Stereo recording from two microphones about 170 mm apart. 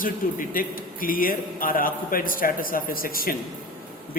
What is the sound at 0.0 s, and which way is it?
A man's voice, 55° left (ahead or behind).